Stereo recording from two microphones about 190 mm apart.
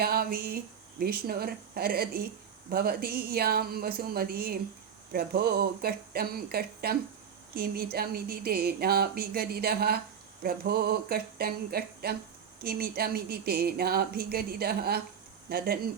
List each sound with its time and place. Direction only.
0.0 s speech: 55° right (ahead or behind)